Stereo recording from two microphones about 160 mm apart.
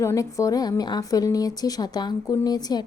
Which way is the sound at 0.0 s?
20° left (ahead or behind).